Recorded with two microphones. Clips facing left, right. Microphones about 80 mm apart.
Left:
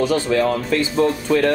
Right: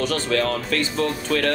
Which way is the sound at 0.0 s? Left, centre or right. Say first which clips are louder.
Left 5 dB; centre.